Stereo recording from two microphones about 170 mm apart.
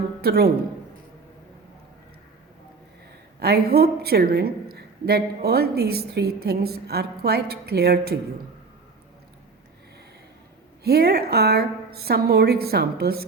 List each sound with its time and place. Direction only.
0.2 s a woman's voice: 65° right (ahead or behind)
3.4 s a woman's voice: 70° right (ahead or behind)
10.8 s a woman's voice: 70° right (ahead or behind)